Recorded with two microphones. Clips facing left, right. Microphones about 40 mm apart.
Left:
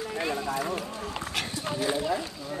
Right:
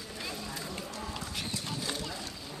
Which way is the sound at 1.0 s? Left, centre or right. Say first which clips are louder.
Left 5 dB; left.